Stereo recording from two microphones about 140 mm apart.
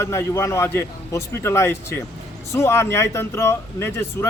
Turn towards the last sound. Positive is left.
turn(degrees=15)  # may be behind; listen again after turning